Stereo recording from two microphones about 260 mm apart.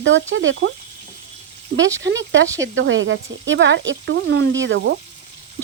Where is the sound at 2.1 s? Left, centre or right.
Right.